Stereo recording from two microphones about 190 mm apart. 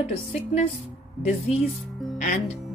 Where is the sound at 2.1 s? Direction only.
40° left (ahead or behind).